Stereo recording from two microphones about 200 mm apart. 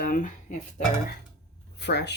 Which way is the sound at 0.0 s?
40° left (ahead or behind).